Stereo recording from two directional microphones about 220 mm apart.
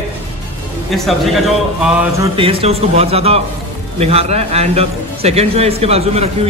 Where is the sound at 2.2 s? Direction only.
25° right (ahead or behind).